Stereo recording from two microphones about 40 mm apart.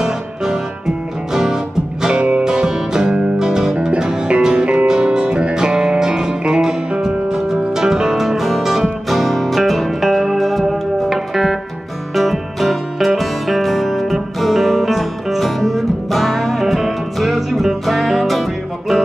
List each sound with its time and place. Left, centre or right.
0.0 s music: centre